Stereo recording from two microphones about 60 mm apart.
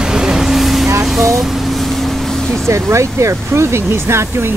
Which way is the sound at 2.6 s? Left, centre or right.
Right.